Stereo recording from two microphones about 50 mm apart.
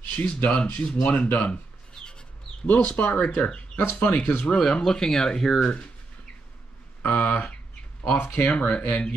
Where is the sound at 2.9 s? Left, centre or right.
Left.